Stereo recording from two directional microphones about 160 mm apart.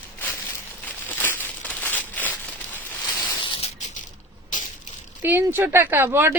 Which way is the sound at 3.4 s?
30° left (ahead or behind).